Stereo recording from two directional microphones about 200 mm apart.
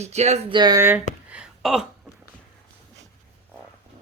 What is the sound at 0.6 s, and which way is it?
Speech, 15° right (ahead or behind).